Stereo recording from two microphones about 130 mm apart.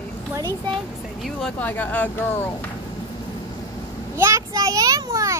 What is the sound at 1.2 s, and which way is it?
Speech, centre (ahead or behind).